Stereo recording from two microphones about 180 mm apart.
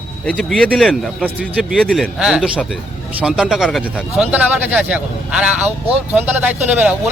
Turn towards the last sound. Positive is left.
turn(degrees=-10)  # may be behind; listen again after turning